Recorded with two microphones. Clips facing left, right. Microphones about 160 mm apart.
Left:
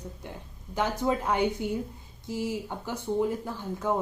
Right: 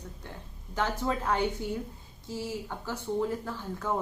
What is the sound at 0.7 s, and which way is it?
A woman's voice, 15° left (ahead or behind).